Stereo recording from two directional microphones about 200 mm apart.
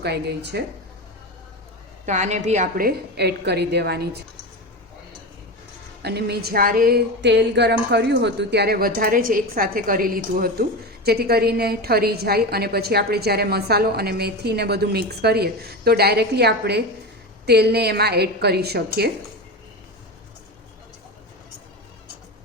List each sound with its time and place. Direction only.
0.0 s speech: 55° right (ahead or behind)
2.0 s speech: 35° right (ahead or behind); by 4.2 s 55° right (ahead or behind)
6.0 s speech: 55° right (ahead or behind)